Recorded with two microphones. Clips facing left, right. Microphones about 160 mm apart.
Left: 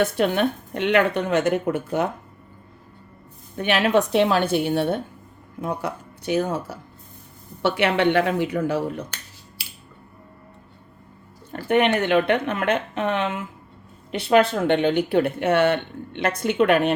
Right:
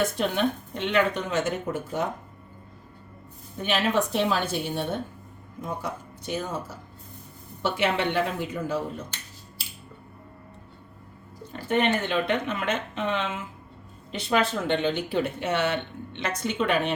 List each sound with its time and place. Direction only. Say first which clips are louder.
0.2 s speech: left 4 dB; 60° left (ahead or behind)
3.6 s speech: left 5 dB; 70° left (ahead or behind)
11.5 s speech: left 5 dB; 65° left (ahead or behind)